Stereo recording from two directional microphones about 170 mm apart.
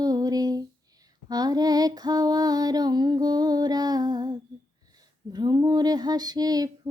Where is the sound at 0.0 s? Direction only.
20° right (ahead or behind).